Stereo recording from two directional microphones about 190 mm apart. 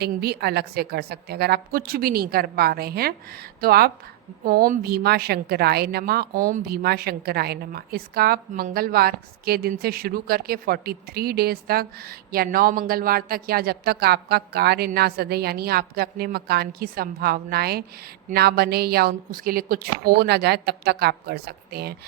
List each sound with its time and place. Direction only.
0.0 s a woman's voice: 55° right (ahead or behind)